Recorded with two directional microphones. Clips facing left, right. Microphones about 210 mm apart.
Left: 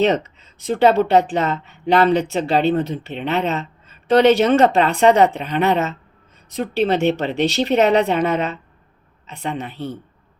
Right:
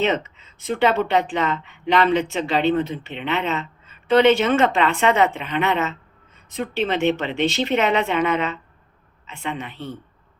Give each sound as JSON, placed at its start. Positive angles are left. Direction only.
{"t": 0.0, "sound": "speech", "side_deg": 40}